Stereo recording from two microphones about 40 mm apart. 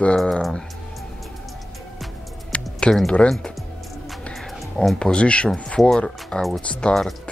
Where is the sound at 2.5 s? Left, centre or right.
Left.